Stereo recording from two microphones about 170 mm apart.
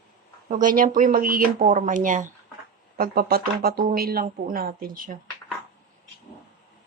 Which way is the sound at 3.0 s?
65° right (ahead or behind).